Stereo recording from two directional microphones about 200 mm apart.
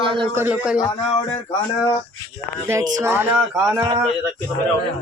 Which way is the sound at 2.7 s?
15° right (ahead or behind).